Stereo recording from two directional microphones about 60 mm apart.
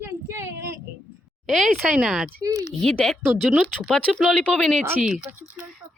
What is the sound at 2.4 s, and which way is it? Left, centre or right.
Speech, right.